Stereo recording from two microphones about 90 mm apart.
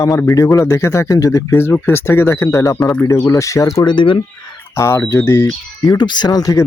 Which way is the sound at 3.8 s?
65° left (ahead or behind).